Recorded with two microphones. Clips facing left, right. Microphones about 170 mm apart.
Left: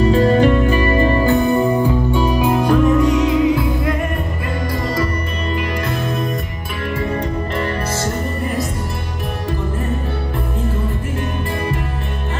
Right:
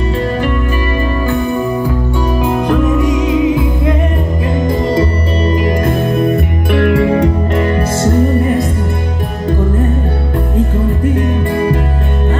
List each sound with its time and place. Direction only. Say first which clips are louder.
0.1 s music: left 3 dB; 30° left (ahead or behind)
2.1 s music: right 1 dB; 10° left (ahead or behind)
3.0 s music: right 2 dB; 15° right (ahead or behind)
5.5 s music: right 7 dB; 40° right (ahead or behind); by 7.2 s 75° right (ahead or behind)